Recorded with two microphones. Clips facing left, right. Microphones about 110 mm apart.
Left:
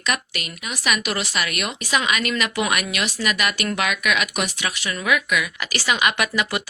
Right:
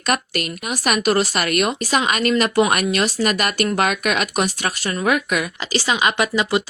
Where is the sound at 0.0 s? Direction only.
45° right (ahead or behind).